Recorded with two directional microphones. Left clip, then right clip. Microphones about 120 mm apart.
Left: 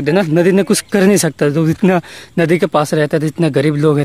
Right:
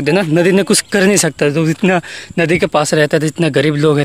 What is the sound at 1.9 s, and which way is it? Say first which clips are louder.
Speech: right 1 dB; 25° left (ahead or behind).